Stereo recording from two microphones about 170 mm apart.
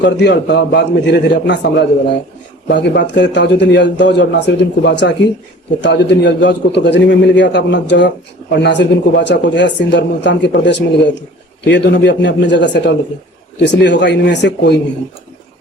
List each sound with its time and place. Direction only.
0.0 s a man's voice: 90° left